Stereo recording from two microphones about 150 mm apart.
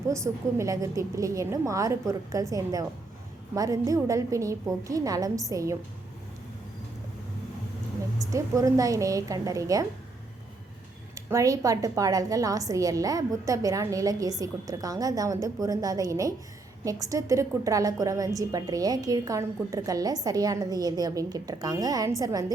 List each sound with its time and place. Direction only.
0.1 s a woman's voice: 20° right (ahead or behind)
8.2 s a woman's voice: 20° right (ahead or behind)
11.1 s a woman's voice: 20° right (ahead or behind)